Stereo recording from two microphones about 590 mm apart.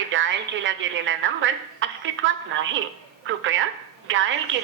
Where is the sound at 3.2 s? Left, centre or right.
Centre.